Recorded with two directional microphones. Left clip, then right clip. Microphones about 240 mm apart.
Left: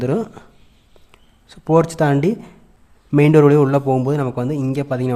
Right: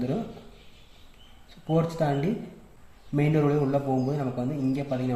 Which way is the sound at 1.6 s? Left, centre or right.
Left.